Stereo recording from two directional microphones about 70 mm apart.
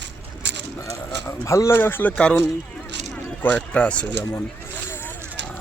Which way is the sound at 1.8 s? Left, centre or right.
Left.